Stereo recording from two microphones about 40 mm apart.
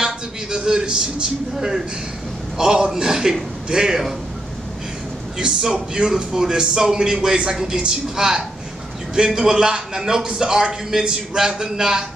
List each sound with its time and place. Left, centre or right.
0.0 s a man's voice: right
5.4 s a man's voice: centre